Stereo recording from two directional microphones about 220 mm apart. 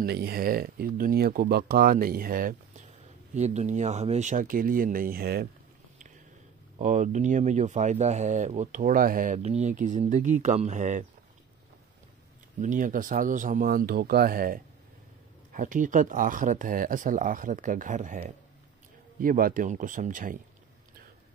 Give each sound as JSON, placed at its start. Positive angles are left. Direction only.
{"t": 0.0, "sound": "speech", "side_deg": -45}
{"t": 6.8, "sound": "speech", "side_deg": -35}
{"t": 12.5, "sound": "speech", "side_deg": -35}